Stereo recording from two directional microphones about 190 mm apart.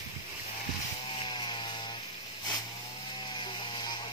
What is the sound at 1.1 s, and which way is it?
Chainsaw, 25° left (ahead or behind).